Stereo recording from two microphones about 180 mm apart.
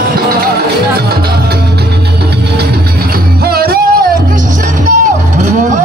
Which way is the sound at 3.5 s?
60° right (ahead or behind).